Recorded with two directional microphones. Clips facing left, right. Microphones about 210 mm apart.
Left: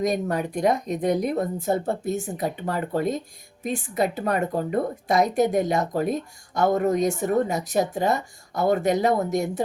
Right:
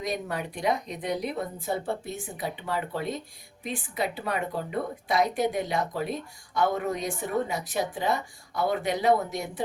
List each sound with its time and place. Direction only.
0.0 s speech: 45° left (ahead or behind)